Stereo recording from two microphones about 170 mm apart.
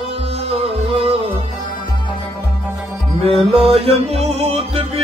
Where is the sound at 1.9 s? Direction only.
25° left (ahead or behind).